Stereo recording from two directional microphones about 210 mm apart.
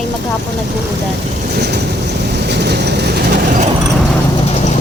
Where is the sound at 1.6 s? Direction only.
50° right (ahead or behind).